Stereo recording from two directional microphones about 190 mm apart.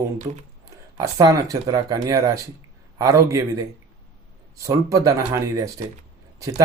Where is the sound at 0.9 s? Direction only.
20° right (ahead or behind).